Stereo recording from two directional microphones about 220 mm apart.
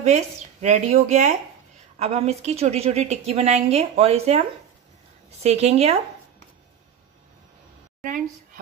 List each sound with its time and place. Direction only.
0.0 s a woman's voice: 30° right (ahead or behind)